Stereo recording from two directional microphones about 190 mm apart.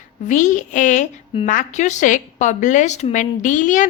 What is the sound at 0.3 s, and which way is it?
A woman's voice, 40° left (ahead or behind).